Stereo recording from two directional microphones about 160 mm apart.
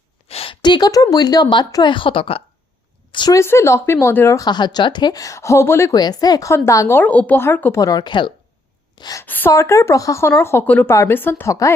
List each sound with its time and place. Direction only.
0.3 s a woman's voice: 35° left (ahead or behind)
9.2 s a woman's voice: 10° left (ahead or behind)